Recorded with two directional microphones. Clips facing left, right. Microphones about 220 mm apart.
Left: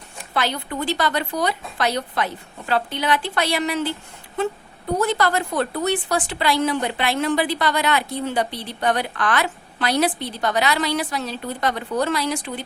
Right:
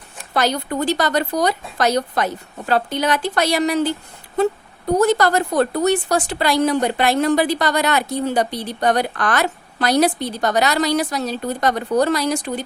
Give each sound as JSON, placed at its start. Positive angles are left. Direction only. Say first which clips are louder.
{"t": 0.3, "sound": "a woman's voice", "louder": "right 5 dB", "side_deg": -40}